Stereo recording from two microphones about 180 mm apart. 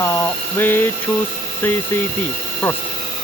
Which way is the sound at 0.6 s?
10° left (ahead or behind).